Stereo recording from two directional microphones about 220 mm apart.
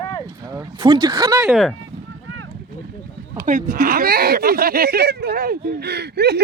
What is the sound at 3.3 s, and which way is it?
Speech, 35° right (ahead or behind).